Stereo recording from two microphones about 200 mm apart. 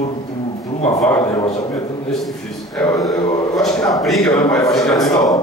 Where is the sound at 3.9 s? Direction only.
Centre (ahead or behind).